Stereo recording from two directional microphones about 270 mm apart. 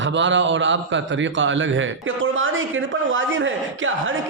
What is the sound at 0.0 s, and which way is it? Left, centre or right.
A man's voice, right.